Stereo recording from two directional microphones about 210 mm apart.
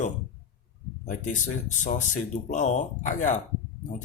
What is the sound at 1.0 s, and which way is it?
Speech, 35° left (ahead or behind).